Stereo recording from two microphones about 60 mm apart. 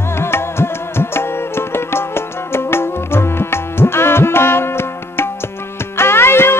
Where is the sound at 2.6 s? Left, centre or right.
Left.